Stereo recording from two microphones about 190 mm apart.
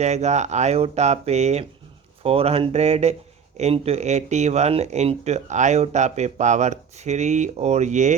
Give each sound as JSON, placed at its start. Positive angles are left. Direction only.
{"t": 0.0, "sound": "speech", "side_deg": -35}